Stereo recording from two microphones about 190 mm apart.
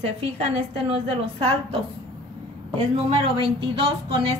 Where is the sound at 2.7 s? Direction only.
30° right (ahead or behind).